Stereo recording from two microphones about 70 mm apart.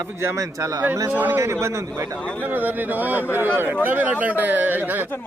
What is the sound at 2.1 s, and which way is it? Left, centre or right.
Speech, centre.